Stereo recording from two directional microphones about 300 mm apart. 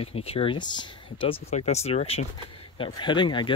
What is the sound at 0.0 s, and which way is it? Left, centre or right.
Speech, centre.